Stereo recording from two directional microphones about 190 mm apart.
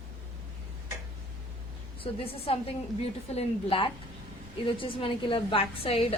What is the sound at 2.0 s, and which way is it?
A woman's voice, 30° left (ahead or behind).